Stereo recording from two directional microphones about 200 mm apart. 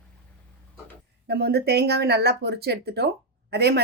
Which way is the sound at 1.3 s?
55° right (ahead or behind).